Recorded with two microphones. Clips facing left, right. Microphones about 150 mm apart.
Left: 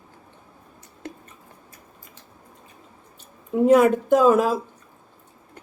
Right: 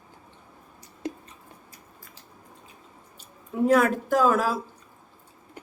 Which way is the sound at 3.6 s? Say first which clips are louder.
Left 5 dB; 20° left (ahead or behind).